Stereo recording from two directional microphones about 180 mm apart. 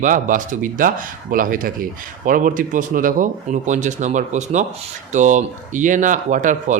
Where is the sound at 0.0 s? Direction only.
45° right (ahead or behind).